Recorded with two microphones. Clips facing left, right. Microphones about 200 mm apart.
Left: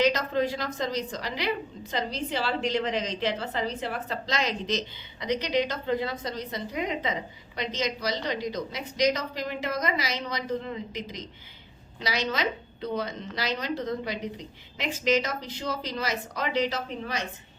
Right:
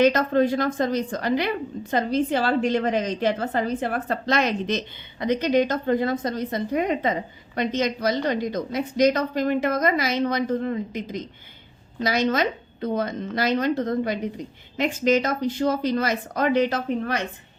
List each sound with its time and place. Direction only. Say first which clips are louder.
0.0 s a woman's voice: right 6 dB; 55° right (ahead or behind)